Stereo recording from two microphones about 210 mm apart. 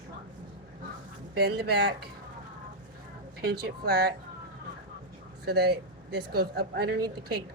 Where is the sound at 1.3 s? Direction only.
50° right (ahead or behind).